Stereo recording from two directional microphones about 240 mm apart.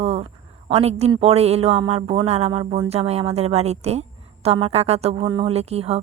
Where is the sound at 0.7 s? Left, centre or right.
Right.